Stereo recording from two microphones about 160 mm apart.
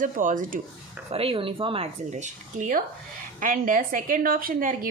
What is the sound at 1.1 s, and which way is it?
A woman's voice, 35° right (ahead or behind).